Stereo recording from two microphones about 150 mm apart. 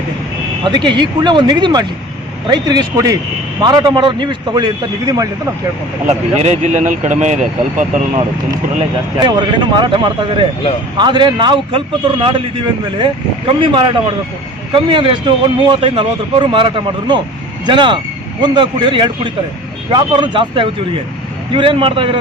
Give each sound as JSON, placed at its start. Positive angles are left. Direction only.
{"t": 0.6, "sound": "a man's voice", "side_deg": -30}
{"t": 6.1, "sound": "speech", "side_deg": -45}
{"t": 9.1, "sound": "a man's voice", "side_deg": -30}
{"t": 13.6, "sound": "a man's voice", "side_deg": -35}